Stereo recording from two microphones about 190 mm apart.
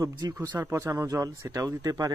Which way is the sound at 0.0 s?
20° right (ahead or behind).